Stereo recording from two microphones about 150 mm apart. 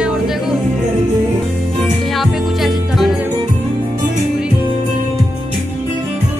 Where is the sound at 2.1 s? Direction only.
Centre (ahead or behind).